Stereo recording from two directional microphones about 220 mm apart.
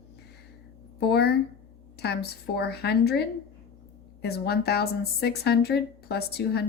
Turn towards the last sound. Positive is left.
turn(degrees=45)  # may be behind; listen again after turning